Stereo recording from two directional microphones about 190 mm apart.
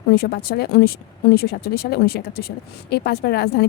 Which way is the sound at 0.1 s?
55° left (ahead or behind).